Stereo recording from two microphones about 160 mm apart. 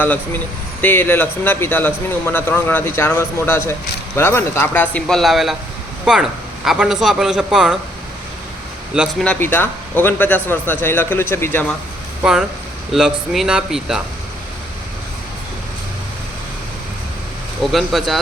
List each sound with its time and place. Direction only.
0.0 s a man's voice: 10° left (ahead or behind)
9.0 s speech: 5° left (ahead or behind)
12.2 s a man's voice: 5° right (ahead or behind)
17.6 s a man's voice: centre (ahead or behind)